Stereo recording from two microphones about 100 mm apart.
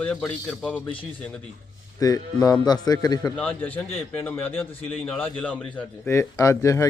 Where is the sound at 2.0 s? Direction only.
35° left (ahead or behind).